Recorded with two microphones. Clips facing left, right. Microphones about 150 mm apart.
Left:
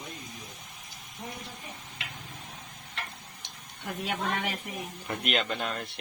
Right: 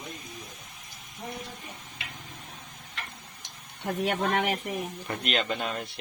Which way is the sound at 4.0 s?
65° right (ahead or behind).